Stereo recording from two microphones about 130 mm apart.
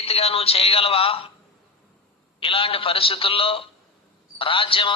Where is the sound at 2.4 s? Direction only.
45° left (ahead or behind).